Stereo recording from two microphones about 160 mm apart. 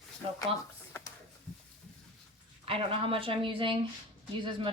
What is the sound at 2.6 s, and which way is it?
A woman's voice, 35° right (ahead or behind).